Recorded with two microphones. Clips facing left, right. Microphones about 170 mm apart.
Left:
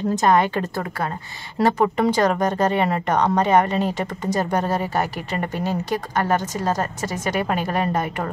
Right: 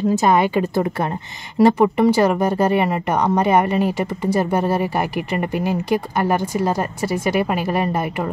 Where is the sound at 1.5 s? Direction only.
10° right (ahead or behind).